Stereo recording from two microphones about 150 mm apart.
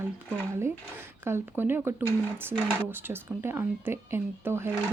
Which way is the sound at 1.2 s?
15° right (ahead or behind).